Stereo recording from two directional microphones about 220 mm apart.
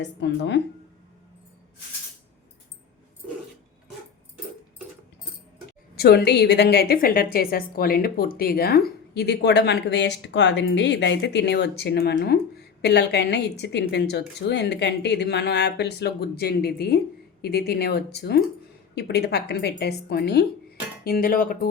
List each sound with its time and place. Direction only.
0.0 s a woman's voice: 55° left (ahead or behind)
6.0 s a woman's voice: 45° left (ahead or behind)